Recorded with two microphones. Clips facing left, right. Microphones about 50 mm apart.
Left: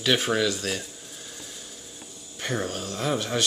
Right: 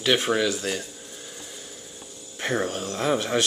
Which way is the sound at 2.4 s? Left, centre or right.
Centre.